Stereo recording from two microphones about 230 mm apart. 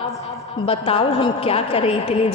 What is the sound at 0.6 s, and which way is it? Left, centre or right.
A woman's voice, left.